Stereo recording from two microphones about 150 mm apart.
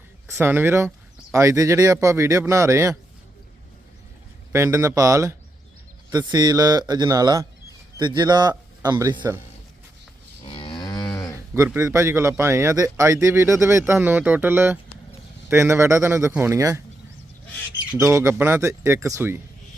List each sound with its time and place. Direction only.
0.3 s speech: 15° right (ahead or behind)
4.5 s a man's voice: 20° right (ahead or behind)
10.5 s moo: 35° left (ahead or behind)
11.5 s speech: 20° right (ahead or behind)
17.9 s speech: 20° right (ahead or behind)